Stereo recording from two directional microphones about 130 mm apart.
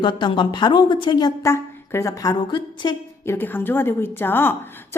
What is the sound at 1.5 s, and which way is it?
A woman's voice, 20° left (ahead or behind).